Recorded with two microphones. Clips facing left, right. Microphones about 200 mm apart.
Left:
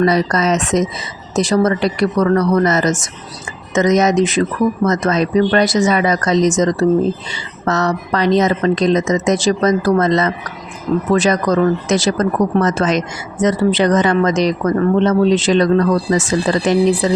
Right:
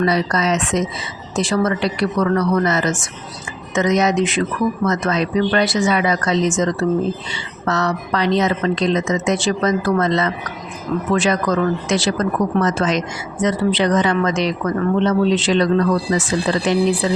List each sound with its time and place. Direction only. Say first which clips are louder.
0.0 s speech: left 3 dB; 45° left (ahead or behind)